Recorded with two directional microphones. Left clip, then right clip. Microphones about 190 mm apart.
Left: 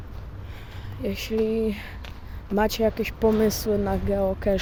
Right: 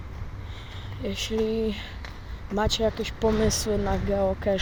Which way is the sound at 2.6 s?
35° left (ahead or behind).